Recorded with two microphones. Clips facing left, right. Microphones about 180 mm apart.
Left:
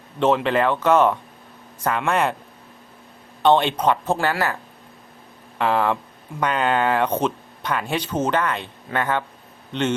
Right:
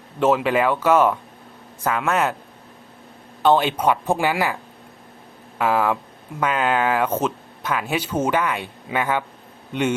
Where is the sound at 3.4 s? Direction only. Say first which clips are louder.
Even; 5° right (ahead or behind).